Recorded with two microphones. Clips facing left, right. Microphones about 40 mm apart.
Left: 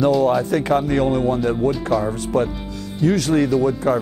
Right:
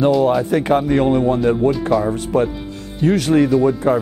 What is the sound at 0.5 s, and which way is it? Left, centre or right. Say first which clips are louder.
Speech: right 3 dB; right.